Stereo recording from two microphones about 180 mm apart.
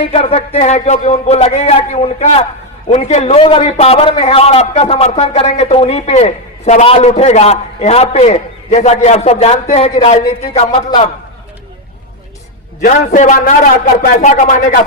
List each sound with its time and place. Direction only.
0.1 s a man's voice: 35° left (ahead or behind)
12.8 s a man's voice: 45° left (ahead or behind)